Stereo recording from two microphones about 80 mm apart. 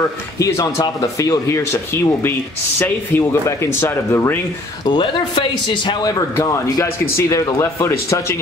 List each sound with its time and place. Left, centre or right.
0.4 s speech: left
2.8 s speech: left
4.8 s speech: left
6.4 s speech: left